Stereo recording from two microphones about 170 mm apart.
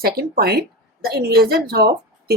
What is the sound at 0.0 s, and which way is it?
Speech, 65° right (ahead or behind).